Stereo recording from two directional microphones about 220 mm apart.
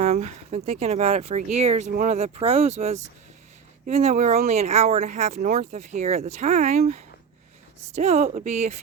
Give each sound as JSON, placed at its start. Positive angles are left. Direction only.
{"t": 0.0, "sound": "speech", "side_deg": -30}